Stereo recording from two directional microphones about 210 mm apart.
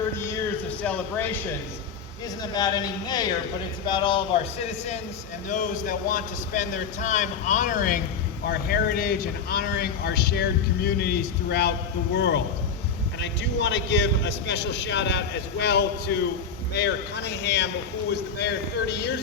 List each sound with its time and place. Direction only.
0.8 s a man's voice: 5° left (ahead or behind)
2.4 s speech: 20° left (ahead or behind)
5.5 s a man's voice: 35° left (ahead or behind); by 19.1 s 55° left (ahead or behind)